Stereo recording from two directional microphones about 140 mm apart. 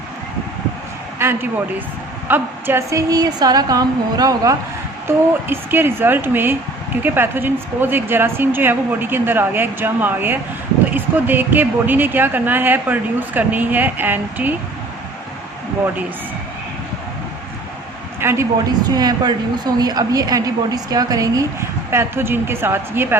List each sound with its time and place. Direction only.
1.2 s a woman's voice: 15° right (ahead or behind)
5.0 s speech: 15° right (ahead or behind)
18.2 s speech: 15° right (ahead or behind)
18.9 s a woman's voice: 30° right (ahead or behind)